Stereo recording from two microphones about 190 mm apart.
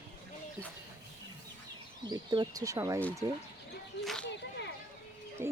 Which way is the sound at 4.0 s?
Centre (ahead or behind).